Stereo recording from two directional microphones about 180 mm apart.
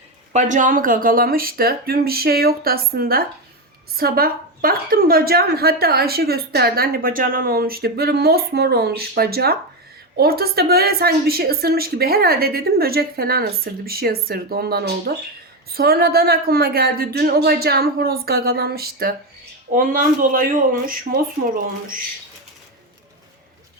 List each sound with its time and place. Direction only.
0.3 s a woman's voice: 45° right (ahead or behind)